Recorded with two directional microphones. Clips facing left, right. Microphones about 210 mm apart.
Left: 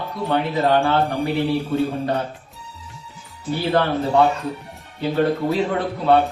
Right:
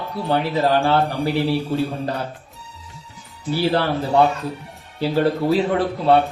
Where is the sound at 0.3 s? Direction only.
30° right (ahead or behind).